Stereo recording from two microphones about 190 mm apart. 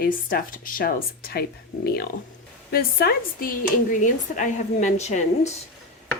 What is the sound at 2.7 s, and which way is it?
Speech, 55° left (ahead or behind).